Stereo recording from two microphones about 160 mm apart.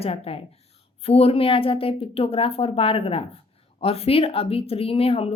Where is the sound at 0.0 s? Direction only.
40° left (ahead or behind).